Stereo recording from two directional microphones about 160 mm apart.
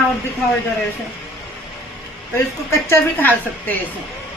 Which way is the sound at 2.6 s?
15° left (ahead or behind).